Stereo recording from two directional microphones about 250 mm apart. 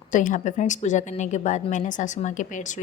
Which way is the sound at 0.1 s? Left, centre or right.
Left.